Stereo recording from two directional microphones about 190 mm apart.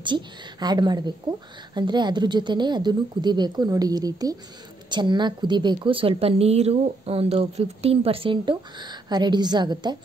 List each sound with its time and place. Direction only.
0.0 s a woman's voice: 25° right (ahead or behind)